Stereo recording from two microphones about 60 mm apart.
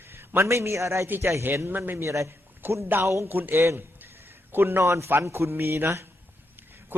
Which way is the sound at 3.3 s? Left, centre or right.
Right.